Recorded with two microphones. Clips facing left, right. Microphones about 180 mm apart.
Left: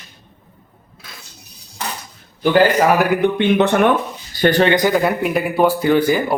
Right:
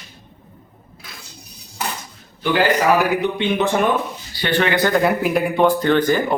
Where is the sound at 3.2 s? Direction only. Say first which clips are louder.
Left 5 dB; 60° left (ahead or behind).